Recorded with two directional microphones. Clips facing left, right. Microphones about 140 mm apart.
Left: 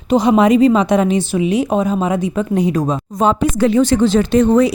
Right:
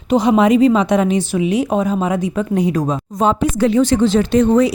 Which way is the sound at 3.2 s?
65° left (ahead or behind).